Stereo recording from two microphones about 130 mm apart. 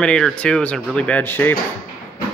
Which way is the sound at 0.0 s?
5° left (ahead or behind).